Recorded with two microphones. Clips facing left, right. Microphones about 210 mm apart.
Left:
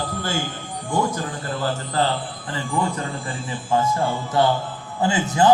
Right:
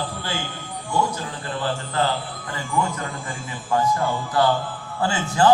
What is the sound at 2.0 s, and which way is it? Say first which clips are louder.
A man's voice: left 1 dB; 35° left (ahead or behind).